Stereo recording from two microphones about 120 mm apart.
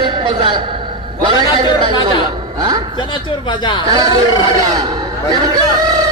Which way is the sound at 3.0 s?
40° left (ahead or behind).